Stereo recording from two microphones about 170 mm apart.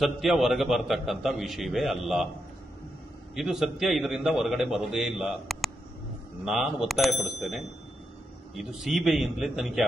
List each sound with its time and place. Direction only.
0.0 s a man's voice: centre (ahead or behind)
3.3 s a man's voice: centre (ahead or behind)